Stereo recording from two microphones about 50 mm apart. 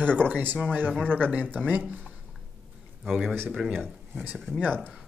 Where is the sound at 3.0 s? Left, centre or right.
Centre.